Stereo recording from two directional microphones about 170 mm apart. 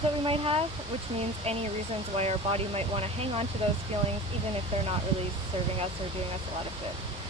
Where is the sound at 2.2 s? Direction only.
35° right (ahead or behind).